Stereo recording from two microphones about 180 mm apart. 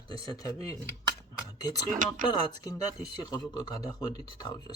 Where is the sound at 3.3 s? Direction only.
20° left (ahead or behind).